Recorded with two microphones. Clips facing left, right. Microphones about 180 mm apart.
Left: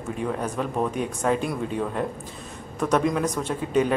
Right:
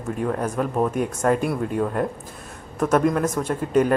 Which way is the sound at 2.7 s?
5° right (ahead or behind).